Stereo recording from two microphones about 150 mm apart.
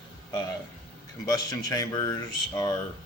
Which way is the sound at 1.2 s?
25° left (ahead or behind).